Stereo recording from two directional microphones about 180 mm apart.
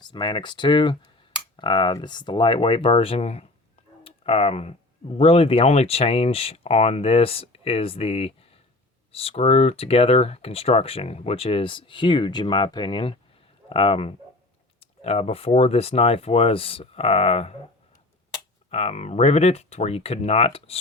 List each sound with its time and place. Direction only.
0.0 s speech: 25° left (ahead or behind)
18.7 s speech: 35° left (ahead or behind)